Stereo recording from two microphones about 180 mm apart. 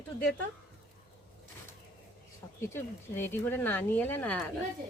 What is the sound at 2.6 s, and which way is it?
Speech, 15° left (ahead or behind).